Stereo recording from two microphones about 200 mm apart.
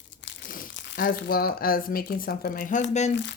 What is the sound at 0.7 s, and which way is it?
Speech, 55° left (ahead or behind).